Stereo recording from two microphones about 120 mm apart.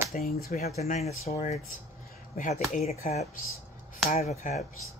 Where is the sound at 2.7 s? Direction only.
65° left (ahead or behind).